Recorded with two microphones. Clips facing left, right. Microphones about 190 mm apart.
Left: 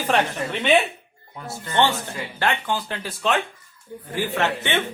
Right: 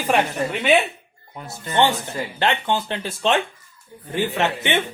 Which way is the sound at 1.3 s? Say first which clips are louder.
Right 1 dB; 20° right (ahead or behind).